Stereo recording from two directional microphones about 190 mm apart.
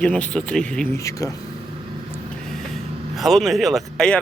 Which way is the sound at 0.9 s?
15° left (ahead or behind).